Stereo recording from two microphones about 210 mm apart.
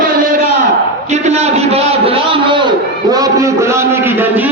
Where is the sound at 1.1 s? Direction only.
30° right (ahead or behind); by 4.4 s 10° right (ahead or behind).